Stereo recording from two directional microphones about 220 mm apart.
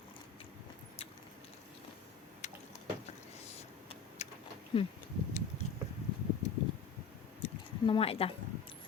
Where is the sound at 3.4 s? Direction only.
30° left (ahead or behind).